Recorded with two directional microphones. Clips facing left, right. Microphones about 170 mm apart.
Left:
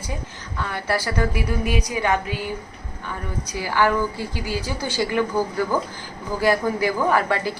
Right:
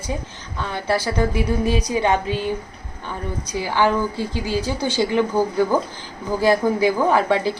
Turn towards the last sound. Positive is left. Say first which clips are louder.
# right 3 dB
turn(degrees=-20)  # may be behind; listen again after turning